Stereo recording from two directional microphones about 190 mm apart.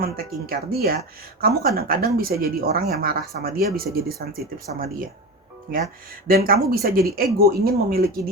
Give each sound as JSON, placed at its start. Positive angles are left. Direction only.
{"t": 0.0, "sound": "speech", "side_deg": -50}